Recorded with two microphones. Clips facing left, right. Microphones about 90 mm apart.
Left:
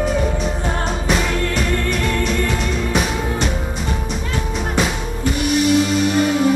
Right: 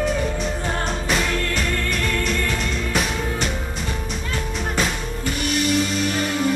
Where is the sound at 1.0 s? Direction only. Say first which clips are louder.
Left 4 dB; centre (ahead or behind).